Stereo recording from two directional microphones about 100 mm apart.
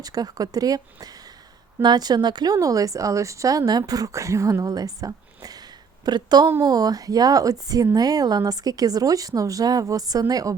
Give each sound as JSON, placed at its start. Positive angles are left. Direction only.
{"t": 0.0, "sound": "a woman's voice", "side_deg": -40}